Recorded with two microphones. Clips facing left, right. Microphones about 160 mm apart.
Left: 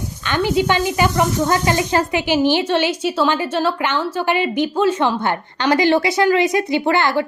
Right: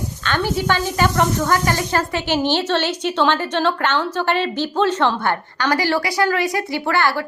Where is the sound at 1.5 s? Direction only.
20° left (ahead or behind).